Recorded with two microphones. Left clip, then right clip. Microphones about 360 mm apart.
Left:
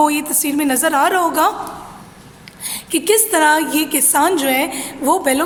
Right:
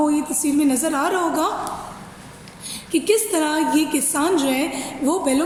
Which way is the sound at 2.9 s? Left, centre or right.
Left.